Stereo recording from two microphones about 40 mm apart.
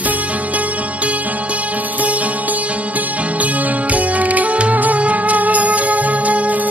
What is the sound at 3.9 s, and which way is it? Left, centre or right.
Music, right.